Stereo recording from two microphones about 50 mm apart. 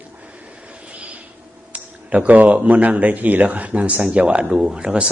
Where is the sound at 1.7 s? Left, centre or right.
Right.